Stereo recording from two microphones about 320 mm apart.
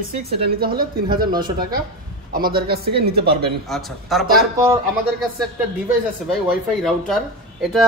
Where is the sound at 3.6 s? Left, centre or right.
Centre.